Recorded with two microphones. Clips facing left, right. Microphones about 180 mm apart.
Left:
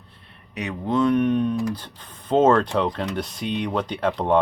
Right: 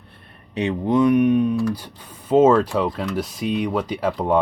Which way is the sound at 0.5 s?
25° right (ahead or behind).